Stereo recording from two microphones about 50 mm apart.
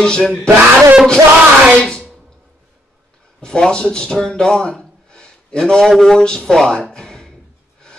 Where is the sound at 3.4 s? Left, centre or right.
Centre.